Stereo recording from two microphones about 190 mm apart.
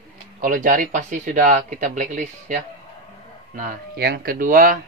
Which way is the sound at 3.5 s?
50° right (ahead or behind).